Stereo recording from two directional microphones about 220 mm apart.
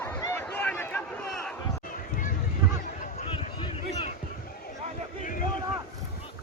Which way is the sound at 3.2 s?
25° left (ahead or behind).